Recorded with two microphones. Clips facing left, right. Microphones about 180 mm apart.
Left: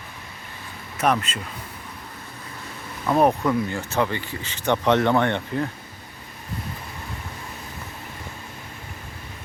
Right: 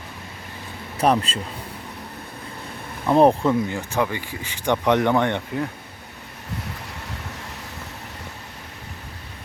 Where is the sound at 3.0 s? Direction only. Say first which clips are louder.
Right 3 dB; 25° right (ahead or behind).